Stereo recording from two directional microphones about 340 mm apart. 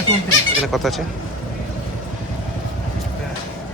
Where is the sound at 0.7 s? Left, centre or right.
Centre.